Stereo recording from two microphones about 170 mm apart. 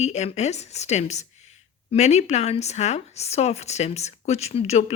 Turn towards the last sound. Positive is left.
turn(degrees=40)  # may be behind; listen again after turning